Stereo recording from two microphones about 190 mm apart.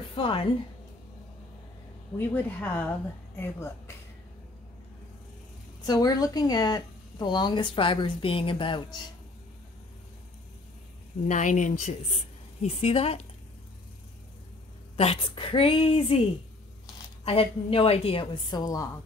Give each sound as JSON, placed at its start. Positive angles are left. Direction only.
{"t": 0.1, "sound": "a woman's voice", "side_deg": 30}
{"t": 2.1, "sound": "speech", "side_deg": 10}
{"t": 5.9, "sound": "a woman's voice", "side_deg": 20}
{"t": 11.2, "sound": "speech", "side_deg": 40}
{"t": 15.0, "sound": "a woman's voice", "side_deg": 30}